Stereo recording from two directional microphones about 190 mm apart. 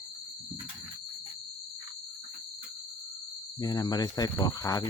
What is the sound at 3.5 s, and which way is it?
Speech, 20° left (ahead or behind).